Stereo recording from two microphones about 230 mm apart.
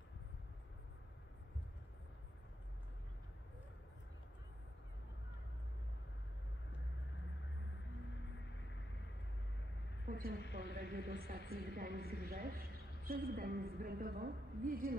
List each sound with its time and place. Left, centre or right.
10.0 s a sound: right
10.4 s a woman's voice: left
10.7 s a woman's voice: right